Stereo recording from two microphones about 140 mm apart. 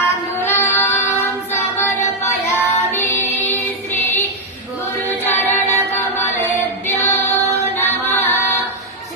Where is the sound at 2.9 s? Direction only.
15° left (ahead or behind).